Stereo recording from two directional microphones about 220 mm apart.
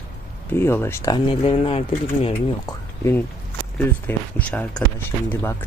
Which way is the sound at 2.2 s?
15° left (ahead or behind).